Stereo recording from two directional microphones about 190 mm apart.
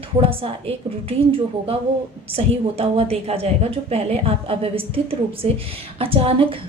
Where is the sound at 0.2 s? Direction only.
30° right (ahead or behind).